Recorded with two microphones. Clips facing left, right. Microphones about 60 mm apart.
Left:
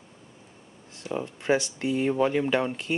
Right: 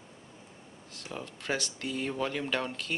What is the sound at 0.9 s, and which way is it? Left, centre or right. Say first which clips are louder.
Speech: left 9 dB; left.